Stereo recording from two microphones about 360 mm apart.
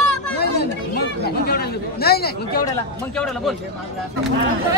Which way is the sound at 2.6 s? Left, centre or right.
Centre.